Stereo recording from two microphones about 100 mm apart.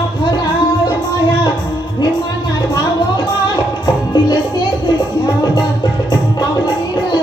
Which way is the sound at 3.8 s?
40° left (ahead or behind).